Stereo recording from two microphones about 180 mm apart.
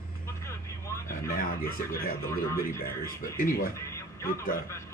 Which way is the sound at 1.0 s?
55° left (ahead or behind).